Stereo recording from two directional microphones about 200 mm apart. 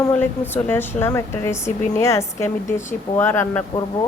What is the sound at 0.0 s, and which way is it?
A woman's voice, 10° left (ahead or behind).